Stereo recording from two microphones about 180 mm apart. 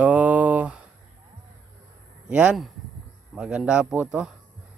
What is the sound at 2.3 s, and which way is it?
Speech, 5° right (ahead or behind).